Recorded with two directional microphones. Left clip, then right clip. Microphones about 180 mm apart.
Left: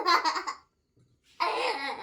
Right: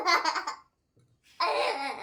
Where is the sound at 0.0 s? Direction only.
5° left (ahead or behind).